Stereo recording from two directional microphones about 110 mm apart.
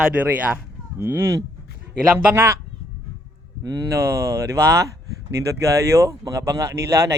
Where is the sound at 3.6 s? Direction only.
30° right (ahead or behind).